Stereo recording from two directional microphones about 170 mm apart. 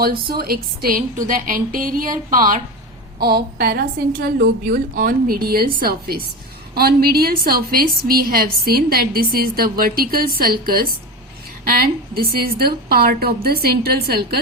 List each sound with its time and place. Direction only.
0.0 s a woman's voice: 65° right (ahead or behind)
3.2 s a woman's voice: 65° right (ahead or behind)